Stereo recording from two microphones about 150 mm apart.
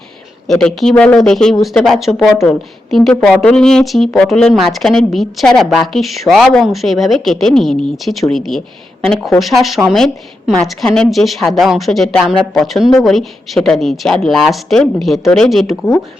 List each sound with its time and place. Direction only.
0.4 s speech: centre (ahead or behind)